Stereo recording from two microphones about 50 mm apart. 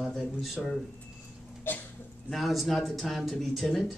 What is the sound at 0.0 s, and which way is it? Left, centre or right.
Speech, centre.